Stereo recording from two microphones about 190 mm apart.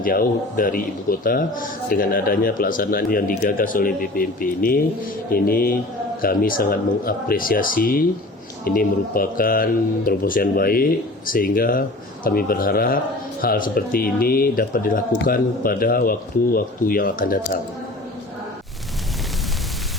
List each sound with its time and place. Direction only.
0.0 s a man's voice: 50° left (ahead or behind)